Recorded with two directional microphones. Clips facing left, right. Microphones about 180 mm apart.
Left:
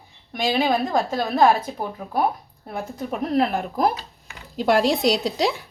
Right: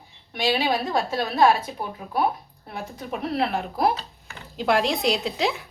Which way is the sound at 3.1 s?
45° left (ahead or behind).